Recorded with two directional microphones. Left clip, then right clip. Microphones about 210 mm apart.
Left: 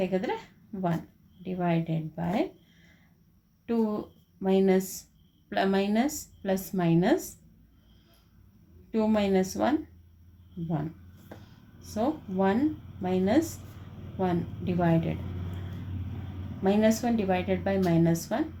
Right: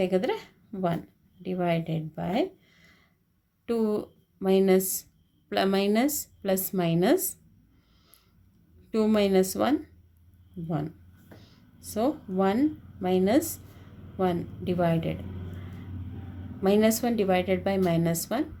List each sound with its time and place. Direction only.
0.0 s a woman's voice: 55° right (ahead or behind)
8.9 s speech: 55° right (ahead or behind)
11.8 s speech: 55° right (ahead or behind)
16.6 s speech: 50° right (ahead or behind)